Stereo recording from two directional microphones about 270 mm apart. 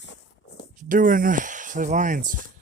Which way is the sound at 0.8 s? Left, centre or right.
Right.